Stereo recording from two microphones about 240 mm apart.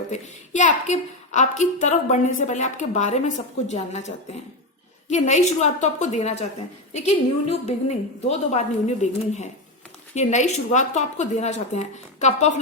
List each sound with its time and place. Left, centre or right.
0.1 s a woman's voice: left